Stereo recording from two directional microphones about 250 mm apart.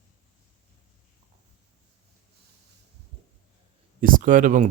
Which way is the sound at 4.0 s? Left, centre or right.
Right.